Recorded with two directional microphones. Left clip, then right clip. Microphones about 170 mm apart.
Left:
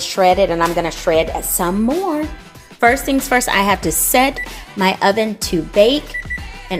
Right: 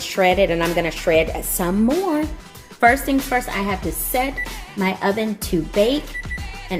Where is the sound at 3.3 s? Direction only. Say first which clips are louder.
Left 7 dB; 40° left (ahead or behind).